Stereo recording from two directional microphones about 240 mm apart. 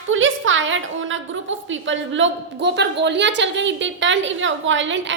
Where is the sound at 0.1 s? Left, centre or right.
Right.